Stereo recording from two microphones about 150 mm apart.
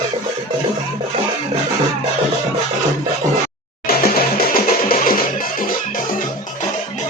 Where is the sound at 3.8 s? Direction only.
90° left; by 5.2 s 70° left (ahead or behind).